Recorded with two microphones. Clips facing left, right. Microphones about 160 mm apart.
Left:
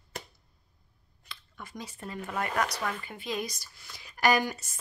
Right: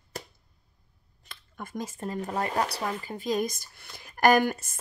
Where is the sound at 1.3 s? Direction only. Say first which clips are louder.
Right 6 dB; 45° right (ahead or behind); by 3.1 s 30° right (ahead or behind).